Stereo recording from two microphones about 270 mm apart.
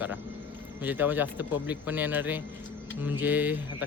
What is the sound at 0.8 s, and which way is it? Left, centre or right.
Speech, centre.